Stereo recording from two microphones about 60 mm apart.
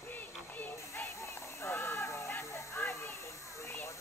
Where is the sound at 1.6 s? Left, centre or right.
Left.